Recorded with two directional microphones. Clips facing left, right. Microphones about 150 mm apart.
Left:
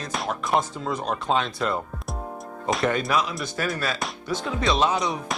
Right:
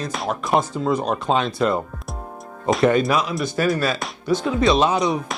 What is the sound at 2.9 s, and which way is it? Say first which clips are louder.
Speech: right 5 dB; 15° right (ahead or behind).